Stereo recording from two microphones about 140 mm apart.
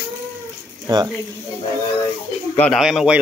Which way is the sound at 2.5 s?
10° left (ahead or behind).